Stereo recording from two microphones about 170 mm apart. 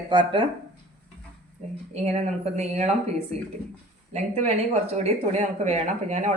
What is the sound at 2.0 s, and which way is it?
Speech, 40° right (ahead or behind).